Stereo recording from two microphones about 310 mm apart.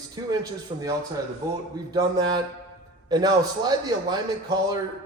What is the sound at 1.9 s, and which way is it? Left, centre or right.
A man's voice, centre.